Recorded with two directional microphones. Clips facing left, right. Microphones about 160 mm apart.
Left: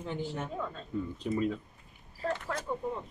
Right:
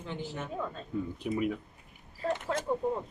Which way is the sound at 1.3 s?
10° right (ahead or behind).